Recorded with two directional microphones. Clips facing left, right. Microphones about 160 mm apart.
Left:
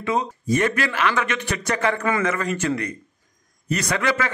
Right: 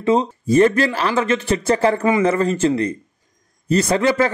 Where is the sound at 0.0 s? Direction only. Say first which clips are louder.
Right 7 dB; 30° right (ahead or behind).